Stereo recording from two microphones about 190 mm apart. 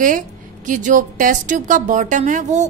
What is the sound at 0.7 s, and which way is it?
Speech, 40° right (ahead or behind).